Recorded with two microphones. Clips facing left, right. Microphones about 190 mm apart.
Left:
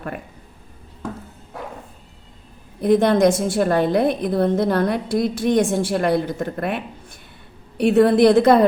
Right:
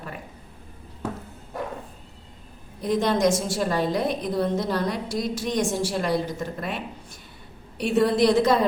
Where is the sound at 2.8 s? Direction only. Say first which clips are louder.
Left 7 dB; 60° left (ahead or behind).